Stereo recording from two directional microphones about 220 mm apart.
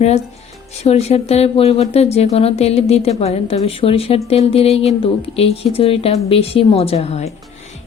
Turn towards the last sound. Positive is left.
turn(degrees=30)  # may be behind; listen again after turning